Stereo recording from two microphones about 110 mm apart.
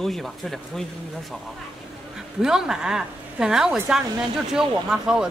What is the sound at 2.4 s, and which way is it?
Speech, 5° right (ahead or behind).